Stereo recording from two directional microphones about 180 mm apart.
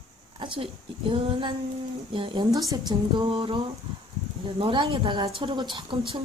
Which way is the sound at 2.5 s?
20° right (ahead or behind).